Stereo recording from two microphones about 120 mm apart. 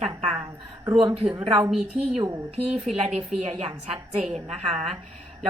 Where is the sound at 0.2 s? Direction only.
55° right (ahead or behind).